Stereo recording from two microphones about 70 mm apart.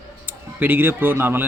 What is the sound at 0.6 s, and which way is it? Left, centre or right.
Speech, right.